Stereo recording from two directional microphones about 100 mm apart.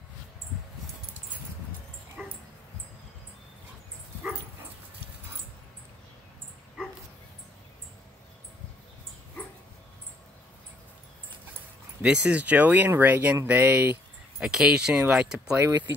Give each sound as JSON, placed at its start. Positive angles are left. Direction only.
{"t": 2.2, "sound": "dog", "side_deg": -15}
{"t": 12.0, "sound": "speech", "side_deg": -10}
{"t": 14.4, "sound": "speech", "side_deg": -5}